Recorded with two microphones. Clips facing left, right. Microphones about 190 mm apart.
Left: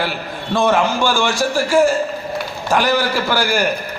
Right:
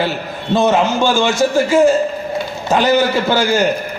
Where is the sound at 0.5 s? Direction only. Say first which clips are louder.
Right 2 dB; 20° right (ahead or behind).